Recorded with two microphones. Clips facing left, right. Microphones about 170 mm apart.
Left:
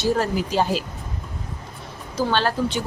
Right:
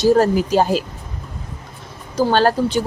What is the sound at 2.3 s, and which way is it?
Speech, 45° right (ahead or behind).